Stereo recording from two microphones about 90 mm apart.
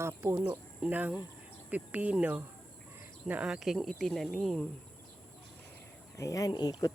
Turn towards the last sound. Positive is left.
turn(degrees=50)  # may be behind; listen again after turning